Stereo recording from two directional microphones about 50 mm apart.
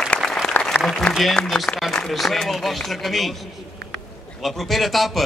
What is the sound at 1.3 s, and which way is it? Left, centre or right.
A man's voice, centre.